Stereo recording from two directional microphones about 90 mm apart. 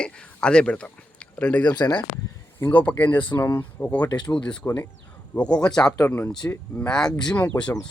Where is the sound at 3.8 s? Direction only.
15° left (ahead or behind).